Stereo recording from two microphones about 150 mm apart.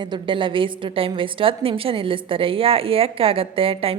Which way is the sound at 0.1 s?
35° right (ahead or behind).